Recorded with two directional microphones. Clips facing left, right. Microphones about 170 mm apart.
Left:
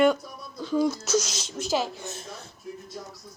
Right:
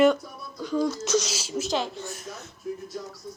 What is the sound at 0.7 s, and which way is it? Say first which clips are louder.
Speech: left 1 dB; 10° left (ahead or behind).